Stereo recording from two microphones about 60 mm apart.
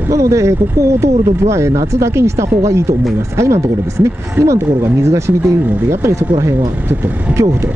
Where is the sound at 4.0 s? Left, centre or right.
Right.